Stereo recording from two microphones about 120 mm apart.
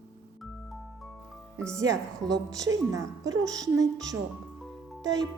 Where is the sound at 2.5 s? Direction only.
30° right (ahead or behind).